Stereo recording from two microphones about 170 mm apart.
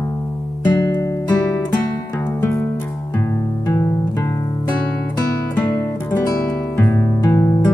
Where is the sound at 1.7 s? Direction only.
20° left (ahead or behind).